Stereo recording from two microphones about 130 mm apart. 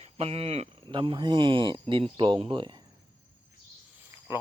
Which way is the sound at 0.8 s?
40° right (ahead or behind).